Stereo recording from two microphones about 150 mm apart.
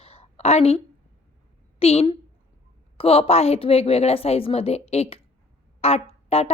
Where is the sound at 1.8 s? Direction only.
40° left (ahead or behind).